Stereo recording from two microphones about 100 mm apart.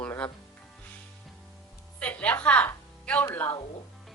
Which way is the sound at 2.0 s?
15° left (ahead or behind).